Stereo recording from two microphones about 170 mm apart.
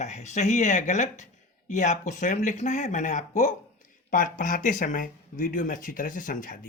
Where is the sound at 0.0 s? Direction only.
45° left (ahead or behind).